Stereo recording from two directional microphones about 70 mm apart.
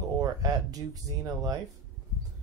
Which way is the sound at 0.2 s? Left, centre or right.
Right.